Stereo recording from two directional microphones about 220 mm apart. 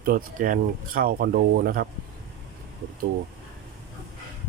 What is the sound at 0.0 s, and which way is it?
Speech, 40° right (ahead or behind).